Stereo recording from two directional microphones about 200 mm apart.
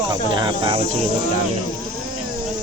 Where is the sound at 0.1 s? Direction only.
20° right (ahead or behind).